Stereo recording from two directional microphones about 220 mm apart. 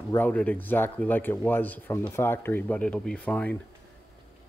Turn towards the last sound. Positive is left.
turn(degrees=5)  # may be behind; listen again after turning